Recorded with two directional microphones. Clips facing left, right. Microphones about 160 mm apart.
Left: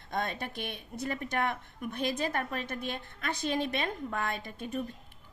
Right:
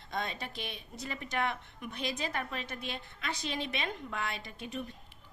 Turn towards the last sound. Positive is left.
turn(degrees=45)  # may be behind; listen again after turning